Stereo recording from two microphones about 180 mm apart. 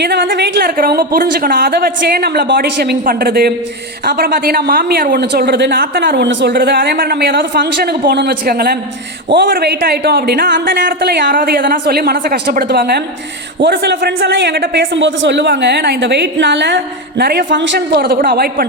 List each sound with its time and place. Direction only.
0.0 s a woman's voice: 65° right (ahead or behind)